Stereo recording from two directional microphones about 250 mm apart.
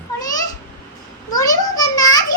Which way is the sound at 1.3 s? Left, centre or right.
Centre.